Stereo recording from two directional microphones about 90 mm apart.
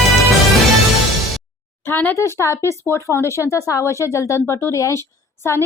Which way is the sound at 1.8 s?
25° left (ahead or behind).